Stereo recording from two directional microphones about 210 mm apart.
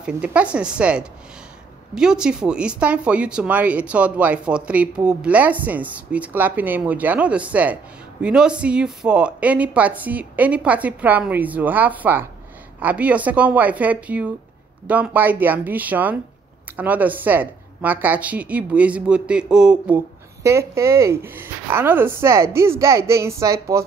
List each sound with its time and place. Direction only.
0.0 s a woman's voice: 5° right (ahead or behind)